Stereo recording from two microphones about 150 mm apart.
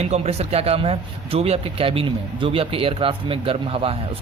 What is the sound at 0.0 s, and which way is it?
Speech, 45° right (ahead or behind).